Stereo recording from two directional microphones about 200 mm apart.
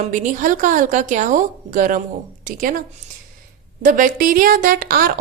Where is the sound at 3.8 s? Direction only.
40° right (ahead or behind).